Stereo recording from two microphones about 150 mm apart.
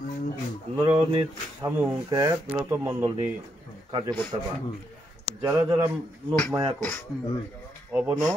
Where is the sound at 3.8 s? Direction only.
35° right (ahead or behind).